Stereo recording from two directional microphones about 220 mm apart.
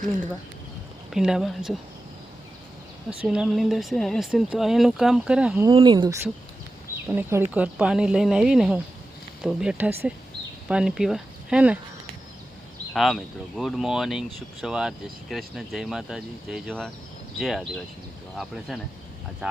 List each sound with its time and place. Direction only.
1.1 s speech: centre (ahead or behind)
3.2 s speech: 5° right (ahead or behind)
5.6 s speech: 20° right (ahead or behind)
7.1 s speech: 10° right (ahead or behind)
12.9 s speech: centre (ahead or behind)